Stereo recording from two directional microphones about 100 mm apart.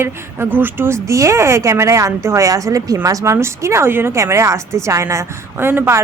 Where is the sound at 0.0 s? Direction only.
20° right (ahead or behind).